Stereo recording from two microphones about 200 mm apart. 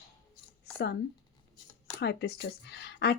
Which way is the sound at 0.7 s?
55° left (ahead or behind).